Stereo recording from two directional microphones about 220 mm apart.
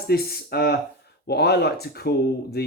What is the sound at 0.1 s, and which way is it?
Speech, 45° left (ahead or behind).